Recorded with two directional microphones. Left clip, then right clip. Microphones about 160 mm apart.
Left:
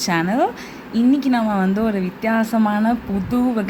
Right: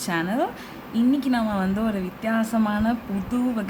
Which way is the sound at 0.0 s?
25° left (ahead or behind).